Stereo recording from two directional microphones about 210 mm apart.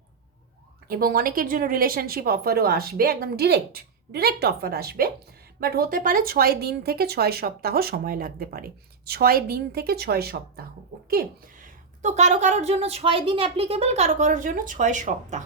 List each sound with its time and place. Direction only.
0.9 s a woman's voice: 45° right (ahead or behind)